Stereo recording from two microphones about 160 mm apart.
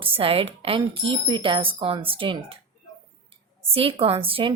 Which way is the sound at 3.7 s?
35° right (ahead or behind).